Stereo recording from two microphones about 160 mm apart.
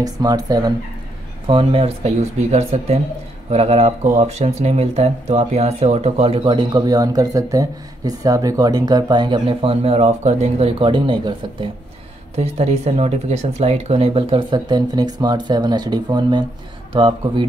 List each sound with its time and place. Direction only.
0.0 s speech: 25° right (ahead or behind)
1.5 s speech: 35° right (ahead or behind)
12.4 s speech: 45° right (ahead or behind)